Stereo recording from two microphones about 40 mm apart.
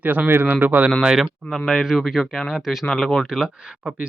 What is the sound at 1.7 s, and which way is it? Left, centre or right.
Speech, centre.